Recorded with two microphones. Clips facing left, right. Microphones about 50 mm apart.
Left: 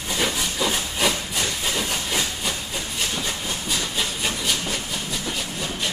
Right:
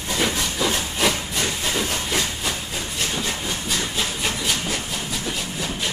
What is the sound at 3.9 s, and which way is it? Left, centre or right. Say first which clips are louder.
Wood: right 1 dB; centre.